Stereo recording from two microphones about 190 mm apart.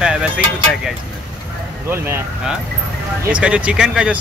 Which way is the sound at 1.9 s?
10° right (ahead or behind).